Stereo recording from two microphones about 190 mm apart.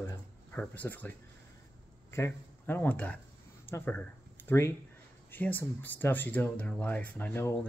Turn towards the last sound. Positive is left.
turn(degrees=15)  # may be behind; listen again after turning